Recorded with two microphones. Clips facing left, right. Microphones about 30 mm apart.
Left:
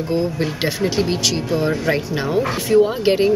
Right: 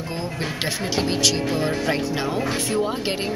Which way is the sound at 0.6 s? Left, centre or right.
Centre.